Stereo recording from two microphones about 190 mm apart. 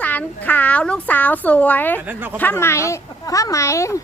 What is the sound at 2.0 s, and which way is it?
Speech, 10° right (ahead or behind).